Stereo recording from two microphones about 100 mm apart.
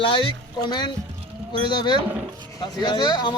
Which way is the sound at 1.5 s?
50° left (ahead or behind).